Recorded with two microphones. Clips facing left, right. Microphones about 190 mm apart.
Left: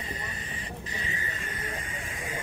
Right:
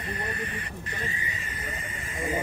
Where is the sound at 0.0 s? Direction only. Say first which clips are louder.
Right 5 dB; 60° right (ahead or behind).